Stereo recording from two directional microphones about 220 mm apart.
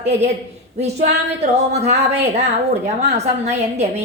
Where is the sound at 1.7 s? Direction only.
30° right (ahead or behind).